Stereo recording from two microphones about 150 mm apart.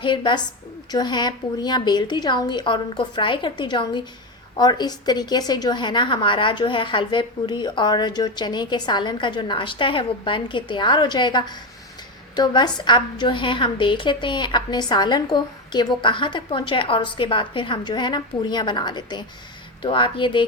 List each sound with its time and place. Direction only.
0.0 s a woman's voice: 30° left (ahead or behind)